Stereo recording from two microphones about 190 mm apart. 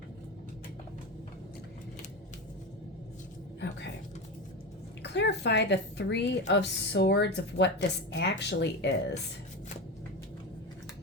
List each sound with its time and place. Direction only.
5.0 s a woman's voice: 65° left (ahead or behind)